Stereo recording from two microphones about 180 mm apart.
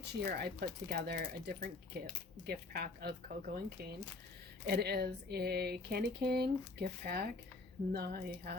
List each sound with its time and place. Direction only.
0.3 s speech: 60° right (ahead or behind)
4.6 s speech: 65° right (ahead or behind)